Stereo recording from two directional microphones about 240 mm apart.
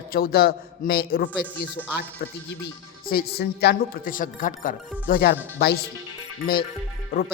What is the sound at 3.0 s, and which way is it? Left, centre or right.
Speech, left.